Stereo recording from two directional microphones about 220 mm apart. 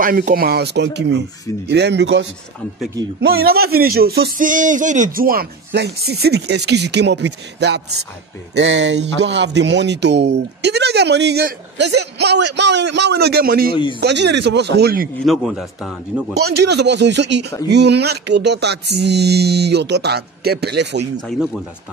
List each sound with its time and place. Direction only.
0.0 s speech: 40° right (ahead or behind)
3.4 s speech: 45° right (ahead or behind)
8.5 s speech: 55° right (ahead or behind)
15.2 s a man's voice: centre (ahead or behind)
16.3 s speech: 45° right (ahead or behind)